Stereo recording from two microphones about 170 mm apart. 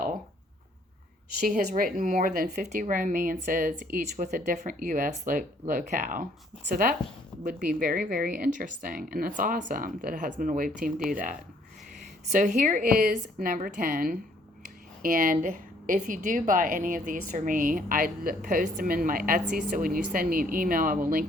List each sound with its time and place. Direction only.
1.5 s a woman's voice: 55° right (ahead or behind)
7.4 s a woman's voice: 50° right (ahead or behind)